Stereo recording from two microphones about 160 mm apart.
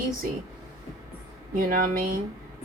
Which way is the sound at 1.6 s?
65° right (ahead or behind).